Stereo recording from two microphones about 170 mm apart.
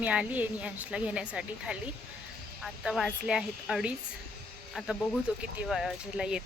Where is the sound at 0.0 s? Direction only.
10° right (ahead or behind).